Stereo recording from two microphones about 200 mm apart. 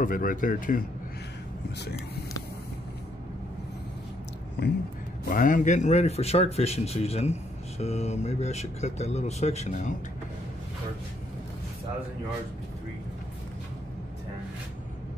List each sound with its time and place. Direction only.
0.0 s speech: 45° left (ahead or behind)
5.3 s speech: 40° left (ahead or behind)